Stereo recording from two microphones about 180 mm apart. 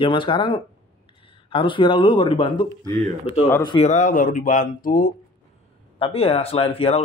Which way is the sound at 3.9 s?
45° left (ahead or behind).